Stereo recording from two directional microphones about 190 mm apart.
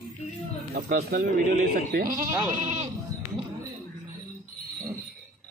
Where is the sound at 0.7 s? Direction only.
50° right (ahead or behind).